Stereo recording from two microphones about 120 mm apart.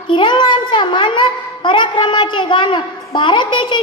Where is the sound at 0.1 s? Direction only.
40° left (ahead or behind).